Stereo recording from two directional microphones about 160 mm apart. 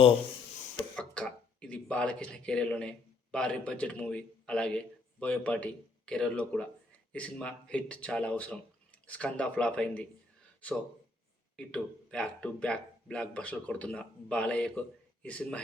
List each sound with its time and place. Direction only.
0.9 s speech: 5° left (ahead or behind)
11.5 s speech: 5° left (ahead or behind)